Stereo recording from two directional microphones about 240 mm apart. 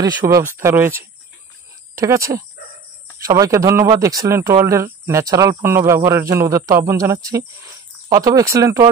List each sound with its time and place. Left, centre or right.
0.3 s speech: centre